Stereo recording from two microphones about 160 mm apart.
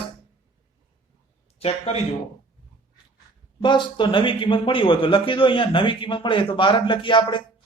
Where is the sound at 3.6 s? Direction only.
30° left (ahead or behind).